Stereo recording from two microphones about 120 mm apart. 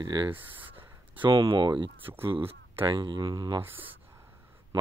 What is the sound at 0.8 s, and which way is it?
Speech, 45° right (ahead or behind).